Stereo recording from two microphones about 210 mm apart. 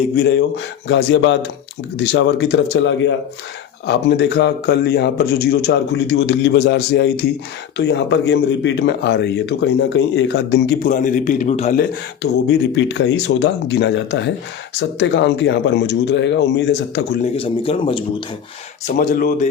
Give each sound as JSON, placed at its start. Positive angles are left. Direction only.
{"t": 0.2, "sound": "a man's voice", "side_deg": 60}
{"t": 10.8, "sound": "a man's voice", "side_deg": 40}
{"t": 12.2, "sound": "speech", "side_deg": 60}
{"t": 17.3, "sound": "speech", "side_deg": 25}
{"t": 18.9, "sound": "a man's voice", "side_deg": 40}